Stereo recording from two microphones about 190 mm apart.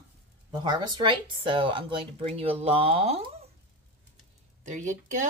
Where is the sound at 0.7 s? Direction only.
25° right (ahead or behind).